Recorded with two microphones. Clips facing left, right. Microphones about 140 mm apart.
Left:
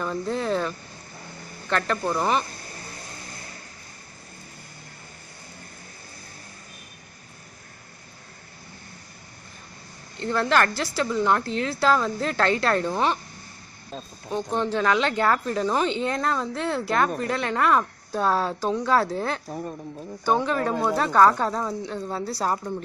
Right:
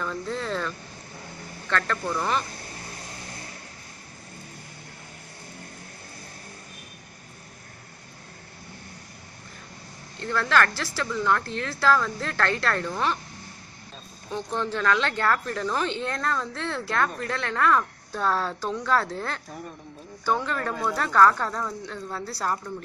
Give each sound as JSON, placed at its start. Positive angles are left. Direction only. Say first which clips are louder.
{"t": 0.0, "sound": "speech", "louder": "left 4 dB", "side_deg": 20}
{"t": 10.2, "sound": "speech", "louder": "left 2 dB", "side_deg": 20}
{"t": 14.3, "sound": "speech", "louder": "left 4 dB", "side_deg": 15}